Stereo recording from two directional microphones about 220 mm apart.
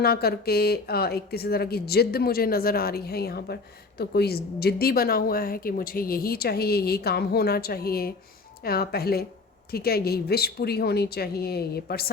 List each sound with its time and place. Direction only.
0.0 s speech: 45° left (ahead or behind)